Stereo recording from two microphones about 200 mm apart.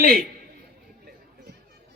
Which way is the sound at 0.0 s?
50° right (ahead or behind).